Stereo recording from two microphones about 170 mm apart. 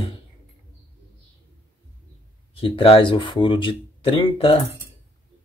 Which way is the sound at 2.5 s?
30° left (ahead or behind).